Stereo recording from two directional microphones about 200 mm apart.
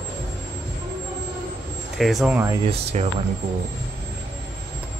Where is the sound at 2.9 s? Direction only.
35° right (ahead or behind).